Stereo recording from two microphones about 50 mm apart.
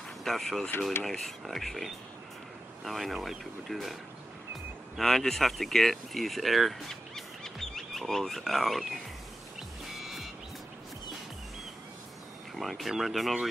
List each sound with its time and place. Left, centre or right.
0.2 s speech: centre
9.9 s music: centre
12.5 s speech: centre